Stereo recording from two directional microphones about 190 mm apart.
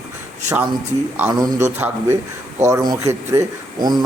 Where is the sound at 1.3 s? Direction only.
20° right (ahead or behind).